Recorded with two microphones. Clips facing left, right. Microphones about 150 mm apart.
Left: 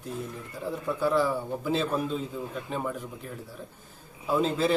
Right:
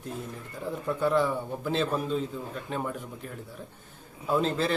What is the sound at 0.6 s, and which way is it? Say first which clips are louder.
A man's voice: even; 5° left (ahead or behind).